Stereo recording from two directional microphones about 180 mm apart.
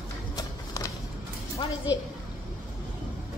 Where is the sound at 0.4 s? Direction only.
20° left (ahead or behind).